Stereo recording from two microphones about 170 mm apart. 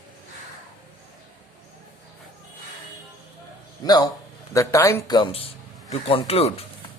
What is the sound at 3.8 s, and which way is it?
Speech, 25° left (ahead or behind).